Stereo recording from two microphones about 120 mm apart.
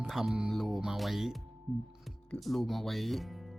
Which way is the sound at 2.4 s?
Centre (ahead or behind).